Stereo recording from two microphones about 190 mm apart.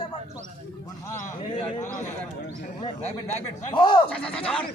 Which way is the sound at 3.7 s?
25° left (ahead or behind).